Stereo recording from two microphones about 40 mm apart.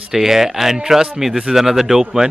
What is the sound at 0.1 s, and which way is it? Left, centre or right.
Speech, centre.